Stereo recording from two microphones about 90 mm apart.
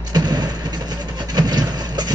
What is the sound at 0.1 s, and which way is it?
Vehicle, 50° right (ahead or behind).